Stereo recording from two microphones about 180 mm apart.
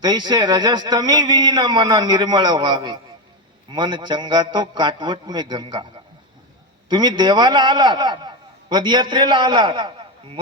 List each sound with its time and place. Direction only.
0.0 s a man's voice: 25° right (ahead or behind)
6.8 s a man's voice: 25° right (ahead or behind)